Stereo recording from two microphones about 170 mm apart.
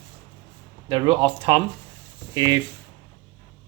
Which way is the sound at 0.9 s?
30° right (ahead or behind).